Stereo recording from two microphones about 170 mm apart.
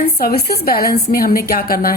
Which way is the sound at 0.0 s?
65° left (ahead or behind).